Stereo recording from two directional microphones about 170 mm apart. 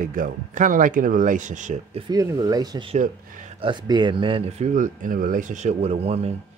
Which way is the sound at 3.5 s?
30° right (ahead or behind).